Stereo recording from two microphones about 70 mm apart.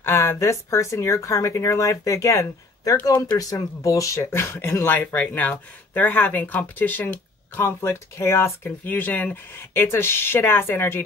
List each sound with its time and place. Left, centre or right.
0.0 s speech: left
8.6 s speech: left